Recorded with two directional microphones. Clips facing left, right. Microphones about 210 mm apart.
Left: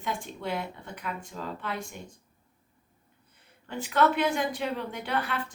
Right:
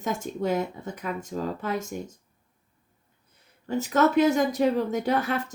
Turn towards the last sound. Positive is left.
turn(degrees=-45)  # may be behind; listen again after turning